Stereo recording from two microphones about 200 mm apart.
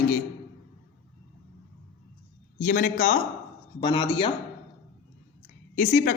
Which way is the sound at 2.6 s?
40° left (ahead or behind).